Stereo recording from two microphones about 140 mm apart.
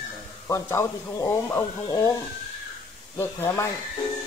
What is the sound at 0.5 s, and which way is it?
Speech, 20° left (ahead or behind).